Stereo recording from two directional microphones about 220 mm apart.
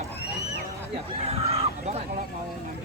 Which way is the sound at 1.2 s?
30° right (ahead or behind).